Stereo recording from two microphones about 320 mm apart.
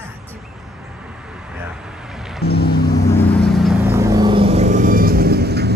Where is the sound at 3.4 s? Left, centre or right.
Centre; by 5.7 s right.